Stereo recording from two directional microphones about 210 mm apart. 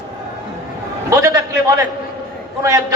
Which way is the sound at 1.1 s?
15° right (ahead or behind).